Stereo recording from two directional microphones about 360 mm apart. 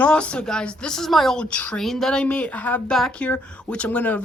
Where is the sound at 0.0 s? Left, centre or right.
Centre.